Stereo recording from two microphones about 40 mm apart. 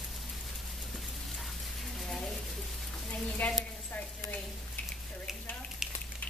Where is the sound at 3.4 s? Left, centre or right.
Left.